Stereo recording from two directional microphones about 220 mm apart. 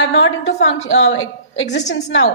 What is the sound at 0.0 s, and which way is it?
A woman's voice, 60° left (ahead or behind).